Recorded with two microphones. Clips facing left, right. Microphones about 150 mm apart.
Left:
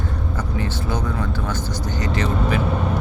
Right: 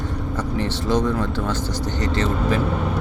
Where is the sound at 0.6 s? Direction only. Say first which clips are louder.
Right 3 dB; 75° right (ahead or behind).